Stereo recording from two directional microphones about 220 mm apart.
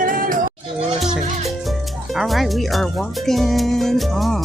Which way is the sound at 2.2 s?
Centre (ahead or behind).